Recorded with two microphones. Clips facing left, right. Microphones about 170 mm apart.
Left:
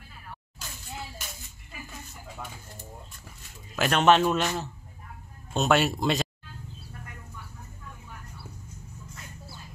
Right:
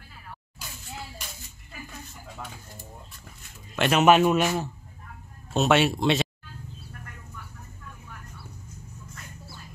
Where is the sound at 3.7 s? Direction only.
Centre (ahead or behind).